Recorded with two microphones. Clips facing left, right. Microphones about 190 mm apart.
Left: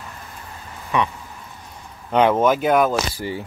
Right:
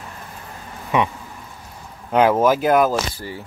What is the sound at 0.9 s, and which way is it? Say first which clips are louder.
Speech: right 2 dB; 20° right (ahead or behind).